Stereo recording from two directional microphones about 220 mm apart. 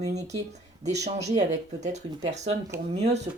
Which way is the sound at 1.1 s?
15° right (ahead or behind).